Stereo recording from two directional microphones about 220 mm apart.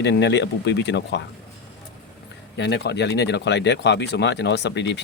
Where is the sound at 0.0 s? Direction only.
50° left (ahead or behind).